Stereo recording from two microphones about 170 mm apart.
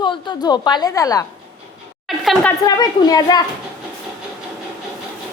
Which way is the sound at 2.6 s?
20° left (ahead or behind).